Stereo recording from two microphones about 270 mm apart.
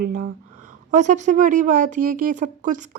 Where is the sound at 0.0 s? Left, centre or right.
Right.